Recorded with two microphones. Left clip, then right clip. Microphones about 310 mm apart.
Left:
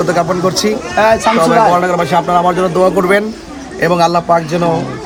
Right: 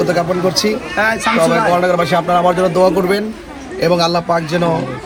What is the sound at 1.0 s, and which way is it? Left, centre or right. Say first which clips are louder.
Speech: left 4 dB; centre.